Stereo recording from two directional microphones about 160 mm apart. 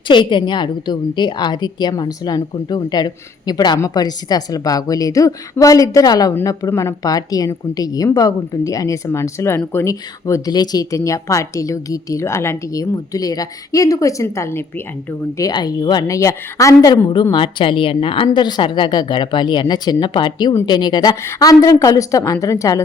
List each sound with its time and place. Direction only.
0.1 s a woman's voice: 30° left (ahead or behind)